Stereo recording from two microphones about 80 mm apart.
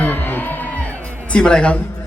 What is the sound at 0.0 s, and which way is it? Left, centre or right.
Music, left.